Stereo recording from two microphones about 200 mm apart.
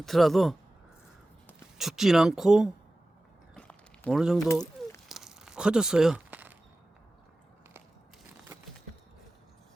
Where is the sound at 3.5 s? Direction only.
5° left (ahead or behind).